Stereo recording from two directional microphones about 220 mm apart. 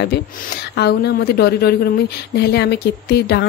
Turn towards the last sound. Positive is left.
turn(degrees=50)  # may be behind; listen again after turning